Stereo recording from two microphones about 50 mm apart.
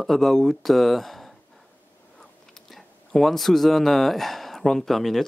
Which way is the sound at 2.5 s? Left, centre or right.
Centre.